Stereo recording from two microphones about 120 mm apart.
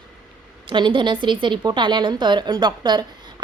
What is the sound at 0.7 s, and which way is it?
A woman's voice, 40° right (ahead or behind).